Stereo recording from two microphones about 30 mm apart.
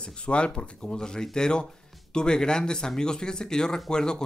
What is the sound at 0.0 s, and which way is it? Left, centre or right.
Speech, left.